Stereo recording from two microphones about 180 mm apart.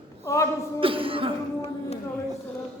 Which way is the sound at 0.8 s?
30° right (ahead or behind).